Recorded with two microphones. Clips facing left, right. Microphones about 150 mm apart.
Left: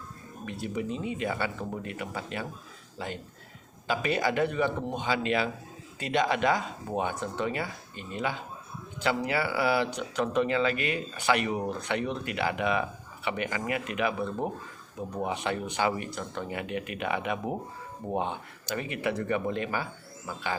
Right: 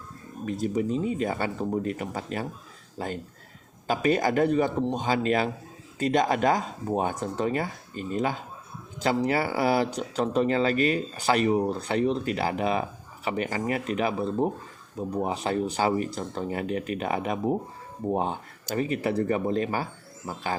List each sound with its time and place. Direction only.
0.4 s speech: 40° right (ahead or behind)